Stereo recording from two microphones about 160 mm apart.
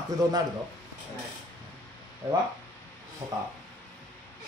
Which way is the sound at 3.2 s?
15° right (ahead or behind).